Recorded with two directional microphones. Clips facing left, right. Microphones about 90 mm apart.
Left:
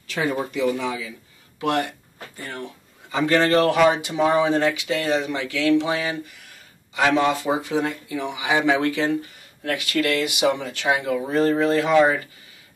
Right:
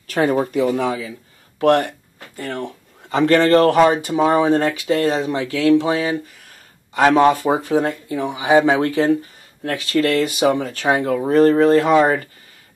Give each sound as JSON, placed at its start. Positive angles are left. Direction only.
{"t": 0.0, "sound": "speech", "side_deg": -50}
{"t": 2.3, "sound": "speech", "side_deg": -70}
{"t": 6.9, "sound": "speech", "side_deg": -45}
{"t": 11.2, "sound": "speech", "side_deg": -55}